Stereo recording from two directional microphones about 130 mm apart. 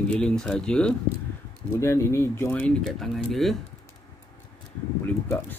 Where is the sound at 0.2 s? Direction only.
5° left (ahead or behind).